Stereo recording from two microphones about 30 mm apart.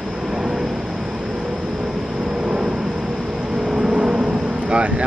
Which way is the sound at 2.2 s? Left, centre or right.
Right.